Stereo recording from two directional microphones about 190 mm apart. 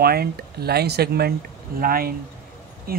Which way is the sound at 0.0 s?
55° right (ahead or behind).